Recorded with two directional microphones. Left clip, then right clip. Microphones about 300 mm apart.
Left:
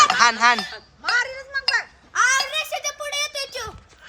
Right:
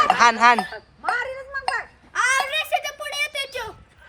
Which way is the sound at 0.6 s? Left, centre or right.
Right.